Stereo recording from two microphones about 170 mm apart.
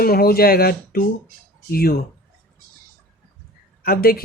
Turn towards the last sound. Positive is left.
turn(degrees=60)  # may be behind; listen again after turning